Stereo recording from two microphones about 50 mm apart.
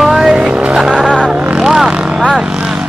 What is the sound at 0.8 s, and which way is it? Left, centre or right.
Speech, centre.